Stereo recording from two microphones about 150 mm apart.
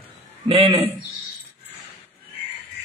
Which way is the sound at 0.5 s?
40° right (ahead or behind).